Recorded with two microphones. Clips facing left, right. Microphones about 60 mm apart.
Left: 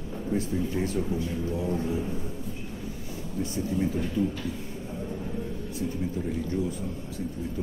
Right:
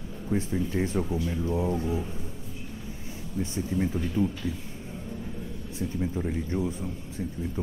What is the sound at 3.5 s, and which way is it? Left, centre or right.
Speech, right.